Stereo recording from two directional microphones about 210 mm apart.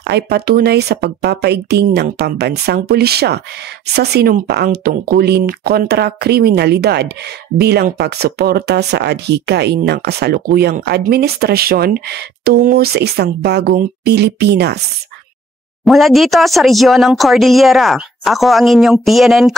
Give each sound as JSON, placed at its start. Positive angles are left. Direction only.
{"t": 0.0, "sound": "speech", "side_deg": -50}
{"t": 15.8, "sound": "speech", "side_deg": 0}